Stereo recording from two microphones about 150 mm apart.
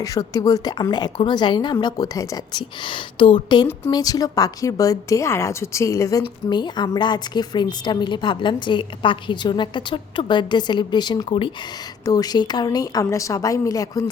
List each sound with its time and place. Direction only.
0.0 s a woman's voice: 25° left (ahead or behind)